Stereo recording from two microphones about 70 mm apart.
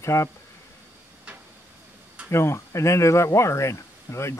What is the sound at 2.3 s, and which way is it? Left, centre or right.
Speech, left.